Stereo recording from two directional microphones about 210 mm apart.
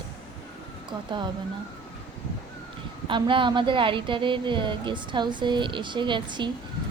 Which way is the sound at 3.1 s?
25° right (ahead or behind).